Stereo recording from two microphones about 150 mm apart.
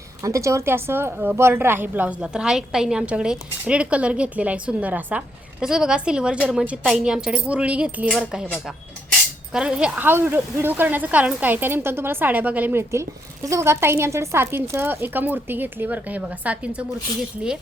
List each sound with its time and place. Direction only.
0.2 s a woman's voice: 20° right (ahead or behind); by 8.4 s 5° right (ahead or behind)
9.5 s a woman's voice: 5° right (ahead or behind)